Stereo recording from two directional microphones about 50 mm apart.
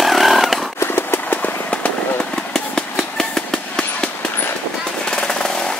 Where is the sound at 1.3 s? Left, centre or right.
Left.